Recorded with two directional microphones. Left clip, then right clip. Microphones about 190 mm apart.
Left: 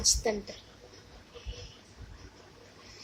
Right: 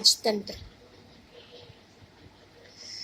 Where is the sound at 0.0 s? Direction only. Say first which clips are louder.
Right 5 dB; 15° right (ahead or behind).